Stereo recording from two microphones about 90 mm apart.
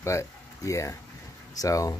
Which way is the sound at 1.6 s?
40° left (ahead or behind).